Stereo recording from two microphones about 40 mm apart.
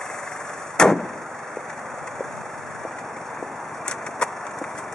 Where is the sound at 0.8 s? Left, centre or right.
Centre.